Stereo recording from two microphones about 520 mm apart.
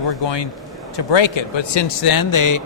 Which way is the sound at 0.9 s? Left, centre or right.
Left.